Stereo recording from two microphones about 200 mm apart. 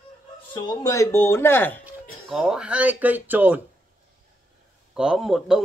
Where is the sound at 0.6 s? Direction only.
15° left (ahead or behind).